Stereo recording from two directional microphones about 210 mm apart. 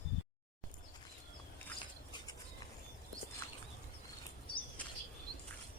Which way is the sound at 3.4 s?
10° left (ahead or behind).